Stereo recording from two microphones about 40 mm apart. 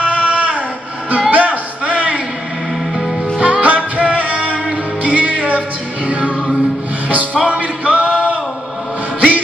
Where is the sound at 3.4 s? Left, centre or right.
Right.